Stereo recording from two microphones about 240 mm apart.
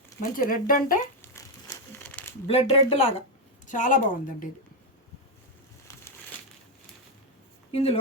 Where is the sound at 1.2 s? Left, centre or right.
Centre.